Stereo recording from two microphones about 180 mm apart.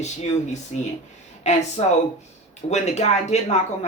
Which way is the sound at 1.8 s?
35° left (ahead or behind).